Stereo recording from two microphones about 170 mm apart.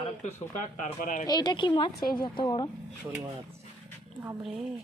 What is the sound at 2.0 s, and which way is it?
Speech, 60° left (ahead or behind).